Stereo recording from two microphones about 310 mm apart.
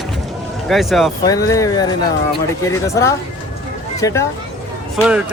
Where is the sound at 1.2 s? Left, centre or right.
Centre.